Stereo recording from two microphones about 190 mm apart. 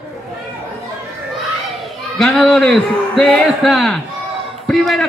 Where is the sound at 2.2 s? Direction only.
Centre (ahead or behind).